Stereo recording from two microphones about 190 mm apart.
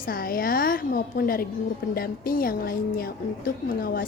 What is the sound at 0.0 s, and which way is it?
A woman's voice, 50° left (ahead or behind).